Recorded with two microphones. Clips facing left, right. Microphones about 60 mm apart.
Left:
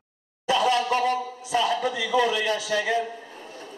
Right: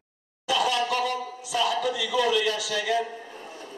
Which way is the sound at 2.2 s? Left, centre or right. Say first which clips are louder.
Even; left.